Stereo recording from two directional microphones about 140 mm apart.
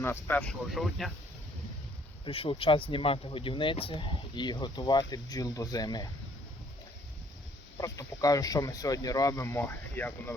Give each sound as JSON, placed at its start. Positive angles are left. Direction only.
{"t": 0.0, "sound": "speech", "side_deg": 15}
{"t": 2.2, "sound": "speech", "side_deg": 40}
{"t": 7.8, "sound": "speech", "side_deg": 25}